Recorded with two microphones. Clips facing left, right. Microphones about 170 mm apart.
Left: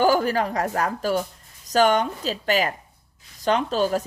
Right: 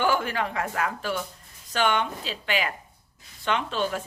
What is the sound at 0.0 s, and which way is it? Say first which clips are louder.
Speech: left 6 dB; 40° left (ahead or behind).